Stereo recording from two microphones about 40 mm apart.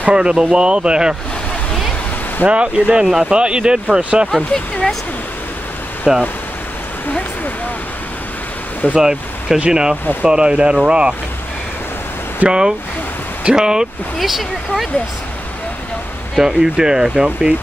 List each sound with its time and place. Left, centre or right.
0.0 s speech: right
2.4 s speech: right
6.1 s speech: centre
8.9 s speech: centre
12.4 s speech: centre
14.1 s speech: centre
16.5 s speech: centre